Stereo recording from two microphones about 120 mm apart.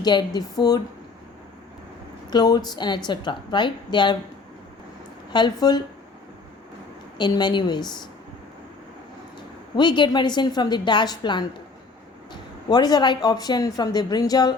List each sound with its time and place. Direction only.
0.0 s speech: 35° left (ahead or behind)
2.3 s speech: 35° left (ahead or behind)
5.3 s speech: 35° left (ahead or behind)
7.2 s speech: 35° left (ahead or behind)
9.7 s speech: 40° left (ahead or behind)